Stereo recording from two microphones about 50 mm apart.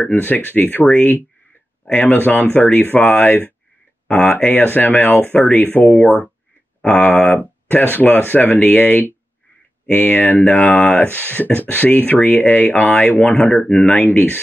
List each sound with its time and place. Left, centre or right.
0.0 s speech: left